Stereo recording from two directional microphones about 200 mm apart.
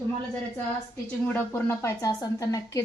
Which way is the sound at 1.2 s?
10° left (ahead or behind).